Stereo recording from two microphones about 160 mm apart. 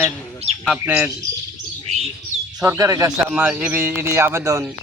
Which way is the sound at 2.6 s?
20° right (ahead or behind).